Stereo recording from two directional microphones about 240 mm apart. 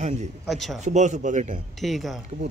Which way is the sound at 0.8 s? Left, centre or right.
Right.